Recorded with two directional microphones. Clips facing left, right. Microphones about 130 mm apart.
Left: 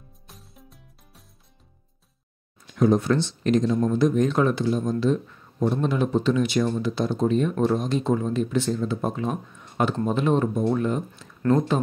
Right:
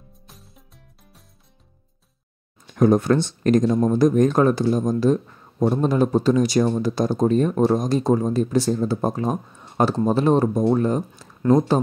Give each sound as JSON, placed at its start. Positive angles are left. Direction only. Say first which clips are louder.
{"t": 0.3, "sound": "music", "louder": "left 3 dB", "side_deg": 0}
{"t": 2.6, "sound": "speech", "louder": "right 3 dB", "side_deg": -50}